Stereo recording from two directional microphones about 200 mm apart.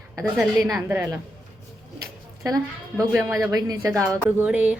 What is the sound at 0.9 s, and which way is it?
Speech, 10° right (ahead or behind).